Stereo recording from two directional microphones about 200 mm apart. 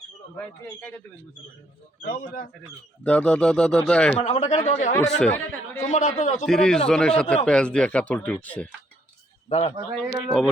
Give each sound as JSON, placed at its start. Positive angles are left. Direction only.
{"t": 0.3, "sound": "speech", "side_deg": 5}
{"t": 3.0, "sound": "speech", "side_deg": 5}
{"t": 4.2, "sound": "speech", "side_deg": 35}
{"t": 5.0, "sound": "speech", "side_deg": 5}
{"t": 5.9, "sound": "speech", "side_deg": 40}
{"t": 6.4, "sound": "speech", "side_deg": 5}
{"t": 9.5, "sound": "speech", "side_deg": 30}
{"t": 10.2, "sound": "speech", "side_deg": 0}